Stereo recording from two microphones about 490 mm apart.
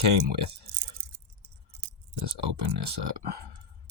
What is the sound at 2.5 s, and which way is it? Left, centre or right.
Speech, right.